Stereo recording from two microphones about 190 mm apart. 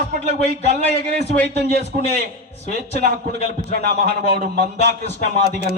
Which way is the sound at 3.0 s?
60° right (ahead or behind).